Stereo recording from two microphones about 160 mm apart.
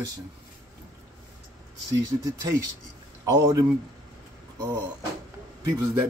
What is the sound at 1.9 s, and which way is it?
Speech, 20° right (ahead or behind).